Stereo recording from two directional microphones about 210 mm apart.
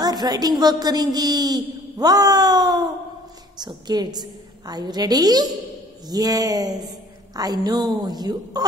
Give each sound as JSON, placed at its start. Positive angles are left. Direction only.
{"t": 0.0, "sound": "a woman's voice", "side_deg": -20}